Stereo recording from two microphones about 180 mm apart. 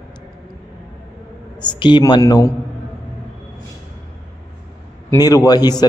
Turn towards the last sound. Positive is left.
turn(degrees=20)  # may be behind; listen again after turning